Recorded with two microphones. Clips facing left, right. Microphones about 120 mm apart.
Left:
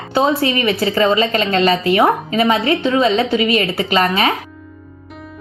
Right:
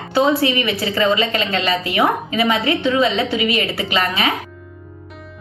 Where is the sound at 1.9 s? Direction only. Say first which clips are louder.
Left 4 dB; 30° left (ahead or behind).